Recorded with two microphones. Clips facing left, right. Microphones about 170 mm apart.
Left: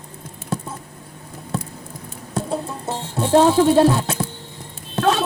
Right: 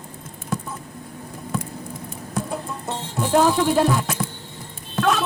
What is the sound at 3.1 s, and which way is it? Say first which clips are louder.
Speech: left 4 dB; 30° left (ahead or behind).